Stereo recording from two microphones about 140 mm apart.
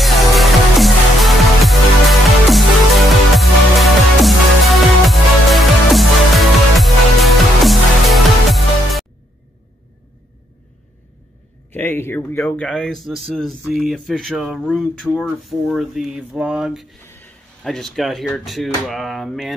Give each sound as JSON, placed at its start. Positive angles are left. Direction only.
{"t": 0.0, "sound": "music", "side_deg": 0}
{"t": 11.7, "sound": "speech", "side_deg": 15}
{"t": 17.0, "sound": "a sound", "side_deg": 15}
{"t": 17.6, "sound": "speech", "side_deg": 0}